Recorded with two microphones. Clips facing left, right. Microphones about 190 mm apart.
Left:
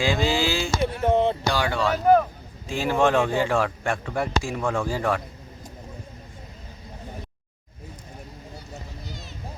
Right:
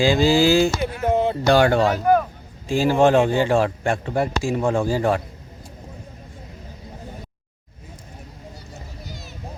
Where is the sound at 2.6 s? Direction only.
30° right (ahead or behind).